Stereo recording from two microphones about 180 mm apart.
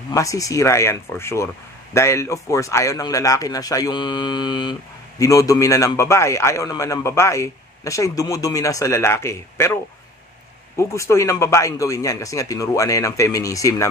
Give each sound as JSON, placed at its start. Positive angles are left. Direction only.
{"t": 0.1, "sound": "a man's voice", "side_deg": 20}
{"t": 10.8, "sound": "a man's voice", "side_deg": 15}